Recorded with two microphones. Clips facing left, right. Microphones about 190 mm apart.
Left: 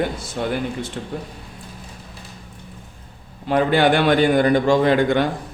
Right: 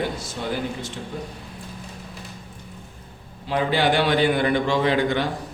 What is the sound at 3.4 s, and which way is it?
A man's voice, 55° left (ahead or behind).